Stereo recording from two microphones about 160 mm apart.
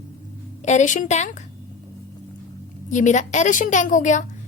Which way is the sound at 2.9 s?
50° left (ahead or behind).